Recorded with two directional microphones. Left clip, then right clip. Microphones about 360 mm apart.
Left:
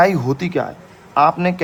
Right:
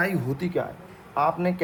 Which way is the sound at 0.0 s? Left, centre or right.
Centre.